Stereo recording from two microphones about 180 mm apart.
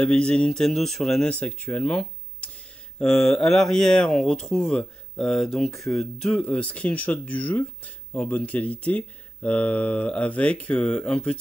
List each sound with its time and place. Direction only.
0.0 s speech: 5° left (ahead or behind)
5.7 s speech: 15° left (ahead or behind)
5.9 s speech: 5° left (ahead or behind)